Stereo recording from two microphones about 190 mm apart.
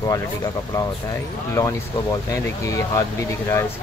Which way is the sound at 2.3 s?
15° left (ahead or behind).